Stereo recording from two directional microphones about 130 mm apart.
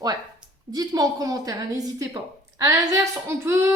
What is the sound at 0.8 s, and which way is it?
Speech, 30° right (ahead or behind).